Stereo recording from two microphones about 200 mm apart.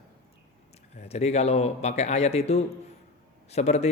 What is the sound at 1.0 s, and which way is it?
A man's voice, 35° left (ahead or behind).